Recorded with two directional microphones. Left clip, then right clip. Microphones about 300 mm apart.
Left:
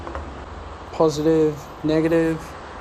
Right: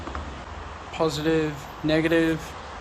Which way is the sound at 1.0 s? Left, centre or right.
Centre.